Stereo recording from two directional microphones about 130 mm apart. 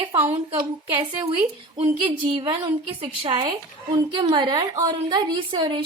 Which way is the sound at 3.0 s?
35° right (ahead or behind).